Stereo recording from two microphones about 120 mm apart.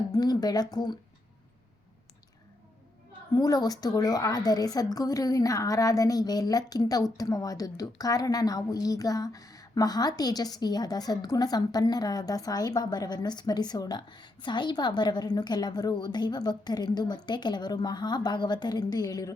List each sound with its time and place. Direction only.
0.1 s a woman's voice: 35° left (ahead or behind)
3.3 s a woman's voice: 30° left (ahead or behind)